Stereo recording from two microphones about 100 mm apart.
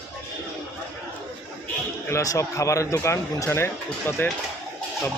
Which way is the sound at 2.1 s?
35° left (ahead or behind).